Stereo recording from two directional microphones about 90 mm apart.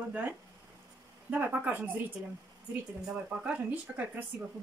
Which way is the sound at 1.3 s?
20° right (ahead or behind).